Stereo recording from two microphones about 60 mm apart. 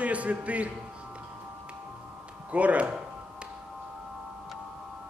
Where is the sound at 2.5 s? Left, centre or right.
Right.